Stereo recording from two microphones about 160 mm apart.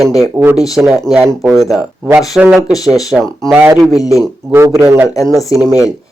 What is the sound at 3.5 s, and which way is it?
Speech, 10° right (ahead or behind).